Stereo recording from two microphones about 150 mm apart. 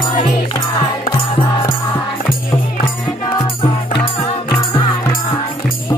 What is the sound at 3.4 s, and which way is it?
Music, 35° left (ahead or behind).